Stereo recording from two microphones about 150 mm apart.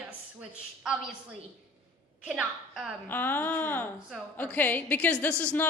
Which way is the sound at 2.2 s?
Centre (ahead or behind).